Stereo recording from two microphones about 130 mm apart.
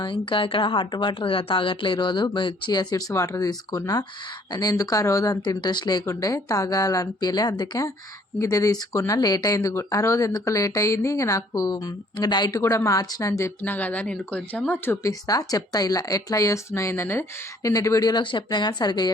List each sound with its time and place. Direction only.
0.0 s a woman's voice: 40° left (ahead or behind); by 13.5 s 25° left (ahead or behind)
13.6 s speech: 15° left (ahead or behind)
15.0 s speech: 30° left (ahead or behind)